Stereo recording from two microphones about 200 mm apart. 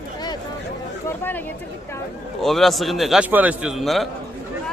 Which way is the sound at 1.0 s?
10° left (ahead or behind).